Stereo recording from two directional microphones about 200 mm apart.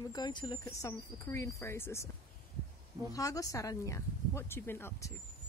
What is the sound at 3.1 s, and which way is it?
Speech, 15° left (ahead or behind).